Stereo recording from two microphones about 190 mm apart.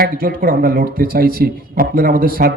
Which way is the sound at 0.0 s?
50° right (ahead or behind).